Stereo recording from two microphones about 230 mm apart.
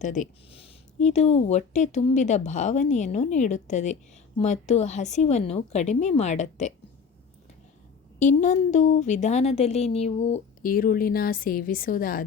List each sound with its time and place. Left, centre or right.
0.0 s a woman's voice: left
8.2 s a woman's voice: left